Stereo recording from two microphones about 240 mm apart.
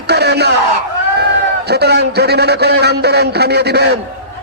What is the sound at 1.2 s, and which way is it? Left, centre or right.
A man's voice, right.